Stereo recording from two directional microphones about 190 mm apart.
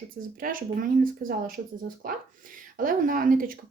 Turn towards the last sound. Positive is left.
turn(degrees=-50)  # may be behind; listen again after turning